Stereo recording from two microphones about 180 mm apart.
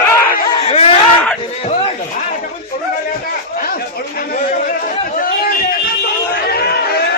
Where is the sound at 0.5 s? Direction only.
30° left (ahead or behind).